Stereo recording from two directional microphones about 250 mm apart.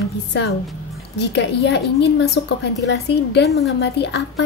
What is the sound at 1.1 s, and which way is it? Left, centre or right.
Speech, left.